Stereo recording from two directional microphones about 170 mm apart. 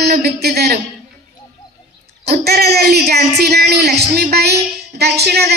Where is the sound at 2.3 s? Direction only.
70° right (ahead or behind).